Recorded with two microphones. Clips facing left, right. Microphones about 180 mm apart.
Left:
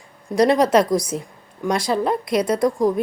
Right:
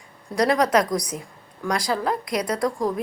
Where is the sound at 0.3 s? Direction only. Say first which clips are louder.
Left 4 dB; 25° left (ahead or behind).